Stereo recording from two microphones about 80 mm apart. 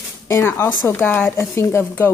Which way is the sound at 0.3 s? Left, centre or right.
Left.